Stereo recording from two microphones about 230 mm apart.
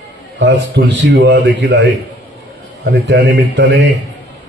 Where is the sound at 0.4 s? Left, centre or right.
Right.